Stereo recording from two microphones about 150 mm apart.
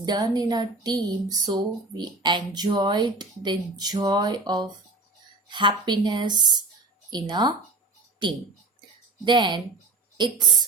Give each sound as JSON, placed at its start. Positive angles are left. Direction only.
{"t": 0.0, "sound": "speech", "side_deg": -25}
{"t": 9.2, "sound": "speech", "side_deg": -30}